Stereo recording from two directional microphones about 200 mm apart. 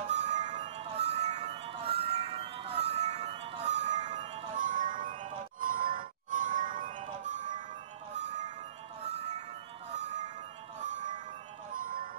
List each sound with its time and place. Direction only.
0.1 s music: 35° right (ahead or behind)
9.0 s music: 35° right (ahead or behind)
10.8 s music: 40° right (ahead or behind)